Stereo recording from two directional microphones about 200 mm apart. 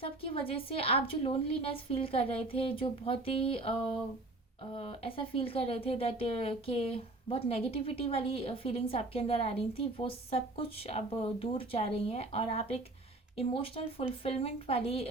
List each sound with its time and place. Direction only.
0.0 s speech: 30° left (ahead or behind)